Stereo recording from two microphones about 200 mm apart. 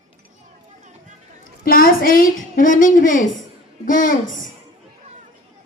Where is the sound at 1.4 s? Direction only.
45° left (ahead or behind).